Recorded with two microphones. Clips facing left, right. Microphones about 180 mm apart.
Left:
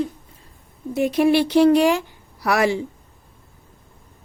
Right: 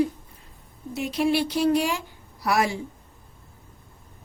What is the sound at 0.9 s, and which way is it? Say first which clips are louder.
Speech: left 7 dB; 55° left (ahead or behind).